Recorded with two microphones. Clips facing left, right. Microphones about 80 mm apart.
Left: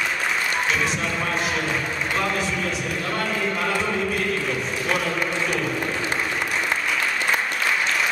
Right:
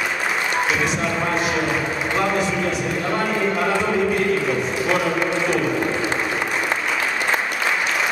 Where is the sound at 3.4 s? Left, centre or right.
Centre.